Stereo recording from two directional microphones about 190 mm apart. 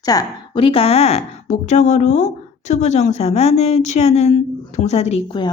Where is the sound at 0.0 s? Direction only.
20° left (ahead or behind).